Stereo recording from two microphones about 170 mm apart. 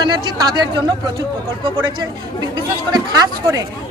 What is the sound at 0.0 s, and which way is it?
Speech, 25° right (ahead or behind).